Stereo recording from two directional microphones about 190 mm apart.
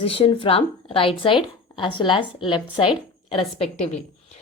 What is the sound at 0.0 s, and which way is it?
A woman's voice, 30° left (ahead or behind).